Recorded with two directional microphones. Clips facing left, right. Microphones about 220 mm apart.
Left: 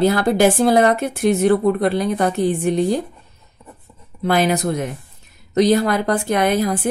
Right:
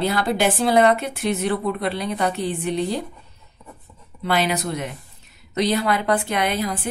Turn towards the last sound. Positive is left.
turn(degrees=45)  # may be behind; listen again after turning